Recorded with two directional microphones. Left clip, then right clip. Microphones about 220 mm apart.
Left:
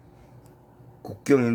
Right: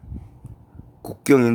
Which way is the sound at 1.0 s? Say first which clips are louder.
Right 5 dB; 50° right (ahead or behind).